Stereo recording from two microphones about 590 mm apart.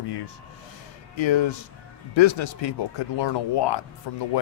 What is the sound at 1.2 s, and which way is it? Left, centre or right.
Speech, left.